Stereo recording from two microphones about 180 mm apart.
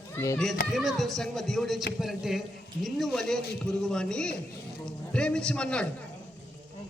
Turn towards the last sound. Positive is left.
turn(degrees=5)  # may be behind; listen again after turning